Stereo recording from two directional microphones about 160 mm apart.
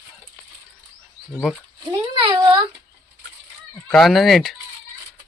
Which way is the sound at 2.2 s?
25° right (ahead or behind).